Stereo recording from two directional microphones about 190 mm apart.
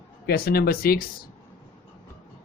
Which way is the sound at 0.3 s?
50° left (ahead or behind).